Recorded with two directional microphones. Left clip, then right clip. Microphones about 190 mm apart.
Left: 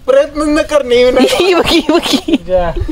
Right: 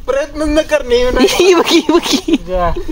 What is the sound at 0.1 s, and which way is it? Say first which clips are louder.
A man's voice: left 4 dB; 40° left (ahead or behind).